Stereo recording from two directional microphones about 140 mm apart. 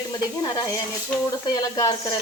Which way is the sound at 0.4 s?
25° left (ahead or behind).